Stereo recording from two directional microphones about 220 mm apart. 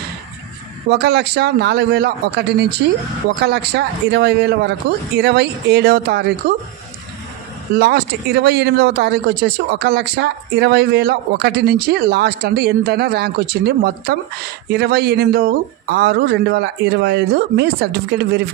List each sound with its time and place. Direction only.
0.8 s speech: 45° right (ahead or behind)
7.7 s speech: 50° right (ahead or behind)